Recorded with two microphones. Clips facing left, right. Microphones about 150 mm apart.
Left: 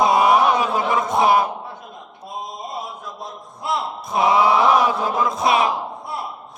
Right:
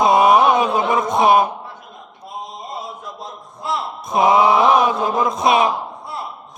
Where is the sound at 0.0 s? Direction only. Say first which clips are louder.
Right 3 dB; 20° right (ahead or behind).